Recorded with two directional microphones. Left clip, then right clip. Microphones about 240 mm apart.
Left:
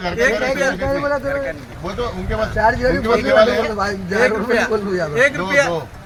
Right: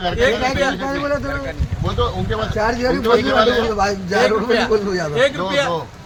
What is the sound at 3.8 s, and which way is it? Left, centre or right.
Speech, right.